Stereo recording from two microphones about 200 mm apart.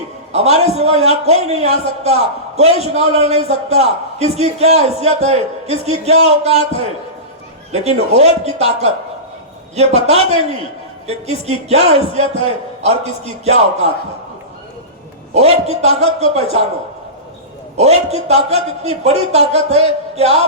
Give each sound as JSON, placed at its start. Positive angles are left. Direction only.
{"t": 0.3, "sound": "a man's voice", "side_deg": -30}
{"t": 9.9, "sound": "a man's voice", "side_deg": -30}
{"t": 15.3, "sound": "a man's voice", "side_deg": -30}
{"t": 17.7, "sound": "a man's voice", "side_deg": -30}